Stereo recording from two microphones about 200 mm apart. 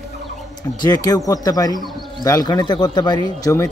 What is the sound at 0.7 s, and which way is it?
Speech, 20° left (ahead or behind).